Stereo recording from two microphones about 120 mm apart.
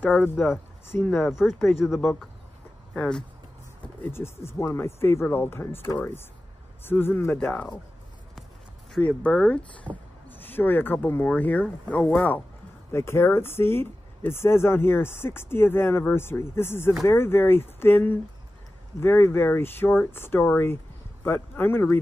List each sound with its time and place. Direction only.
0.9 s speech: 15° left (ahead or behind)
1.5 s speech: centre (ahead or behind)
4.0 s speech: 20° left (ahead or behind)
9.0 s speech: 10° left (ahead or behind)